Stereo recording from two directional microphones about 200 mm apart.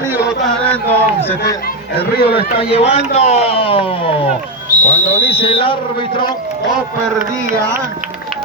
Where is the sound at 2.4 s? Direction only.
30° left (ahead or behind).